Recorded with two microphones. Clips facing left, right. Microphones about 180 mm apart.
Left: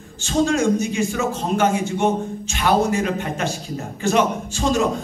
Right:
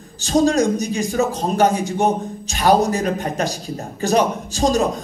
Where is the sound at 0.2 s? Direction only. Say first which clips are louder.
Right 3 dB; 40° right (ahead or behind).